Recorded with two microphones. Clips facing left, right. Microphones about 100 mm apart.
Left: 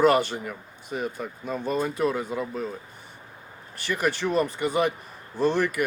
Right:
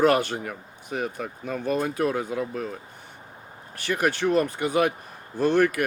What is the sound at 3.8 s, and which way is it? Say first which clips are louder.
Speech: right 2 dB; 55° right (ahead or behind).